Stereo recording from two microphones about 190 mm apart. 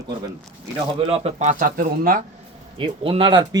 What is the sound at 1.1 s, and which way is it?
Speech, 35° right (ahead or behind).